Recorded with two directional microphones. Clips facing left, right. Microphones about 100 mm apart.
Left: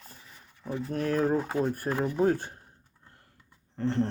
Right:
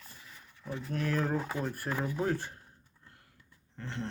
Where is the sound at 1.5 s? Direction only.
25° left (ahead or behind).